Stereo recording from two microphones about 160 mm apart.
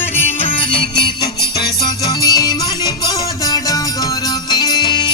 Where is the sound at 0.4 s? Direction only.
30° left (ahead or behind).